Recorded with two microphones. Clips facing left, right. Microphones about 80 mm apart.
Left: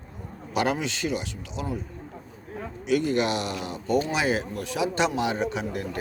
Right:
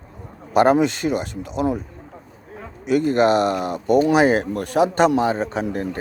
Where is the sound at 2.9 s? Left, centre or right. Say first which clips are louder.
Right 7 dB; right.